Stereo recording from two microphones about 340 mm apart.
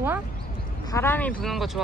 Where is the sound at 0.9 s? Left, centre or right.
Centre.